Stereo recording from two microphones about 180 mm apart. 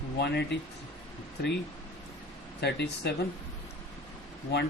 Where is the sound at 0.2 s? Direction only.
70° left (ahead or behind).